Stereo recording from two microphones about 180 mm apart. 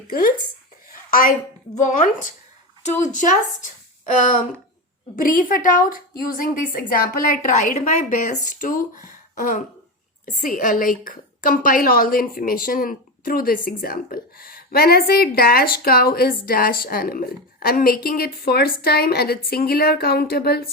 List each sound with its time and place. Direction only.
0.1 s a woman's voice: 55° left (ahead or behind)
0.9 s a sound: 50° left (ahead or behind)
1.8 s a woman's voice: 45° left (ahead or behind); by 20.7 s 60° left (ahead or behind)